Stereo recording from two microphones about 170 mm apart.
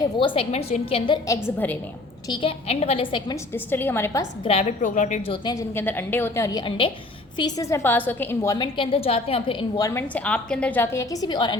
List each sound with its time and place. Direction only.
0.0 s a woman's voice: 30° left (ahead or behind)
1.5 s a woman's voice: 10° left (ahead or behind)
2.3 s a woman's voice: 30° left (ahead or behind)
3.5 s a woman's voice: 10° left (ahead or behind)
4.4 s a woman's voice: 40° left (ahead or behind)
5.3 s a woman's voice: 25° left (ahead or behind)
5.7 s a woman's voice: 10° left (ahead or behind)
8.5 s a woman's voice: 30° left (ahead or behind)
9.8 s a woman's voice: 10° left (ahead or behind)